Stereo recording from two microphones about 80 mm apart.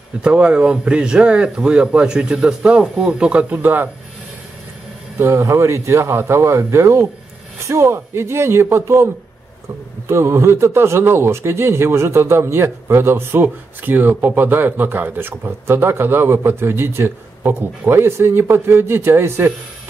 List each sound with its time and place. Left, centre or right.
0.2 s speech: centre
5.2 s speech: right